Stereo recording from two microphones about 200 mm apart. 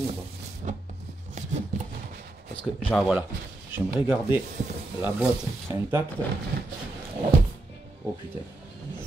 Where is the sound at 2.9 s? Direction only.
5° right (ahead or behind).